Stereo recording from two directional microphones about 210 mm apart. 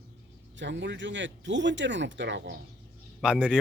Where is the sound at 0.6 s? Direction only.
60° right (ahead or behind).